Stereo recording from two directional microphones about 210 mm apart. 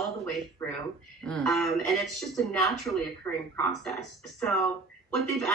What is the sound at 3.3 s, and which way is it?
Speech, 15° left (ahead or behind).